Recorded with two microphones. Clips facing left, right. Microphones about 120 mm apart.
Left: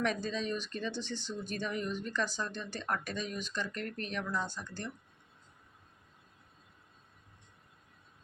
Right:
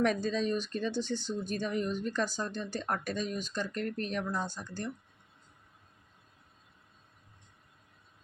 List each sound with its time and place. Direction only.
0.0 s speech: 40° right (ahead or behind)